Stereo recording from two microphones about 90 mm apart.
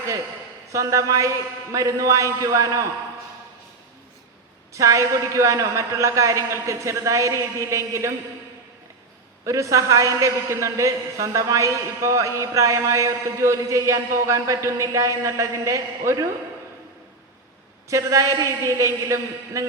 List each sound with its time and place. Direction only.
0.7 s a man's voice: 35° right (ahead or behind)
4.7 s a man's voice: 35° right (ahead or behind)
9.5 s a man's voice: 35° right (ahead or behind)
17.8 s a man's voice: 35° right (ahead or behind)